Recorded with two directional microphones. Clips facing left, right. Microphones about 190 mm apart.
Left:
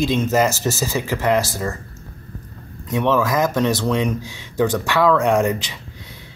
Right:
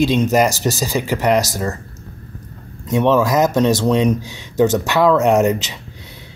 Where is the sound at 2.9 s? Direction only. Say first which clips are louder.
Right 4 dB; 25° right (ahead or behind).